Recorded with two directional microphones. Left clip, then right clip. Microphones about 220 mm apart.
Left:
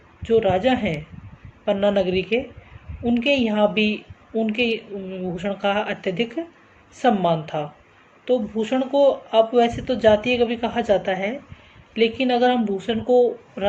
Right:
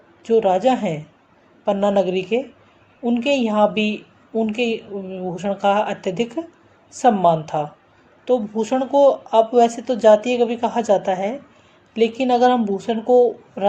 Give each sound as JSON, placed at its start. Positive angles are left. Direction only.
{"t": 0.2, "sound": "a woman's voice", "side_deg": -20}